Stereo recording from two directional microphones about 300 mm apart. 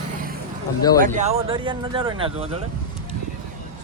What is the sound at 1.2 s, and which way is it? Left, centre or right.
Speech, right.